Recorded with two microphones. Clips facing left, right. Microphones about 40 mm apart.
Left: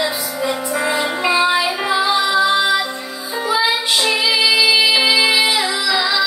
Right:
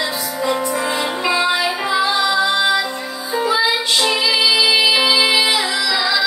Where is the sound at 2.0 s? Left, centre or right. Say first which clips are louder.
Left 2 dB; centre.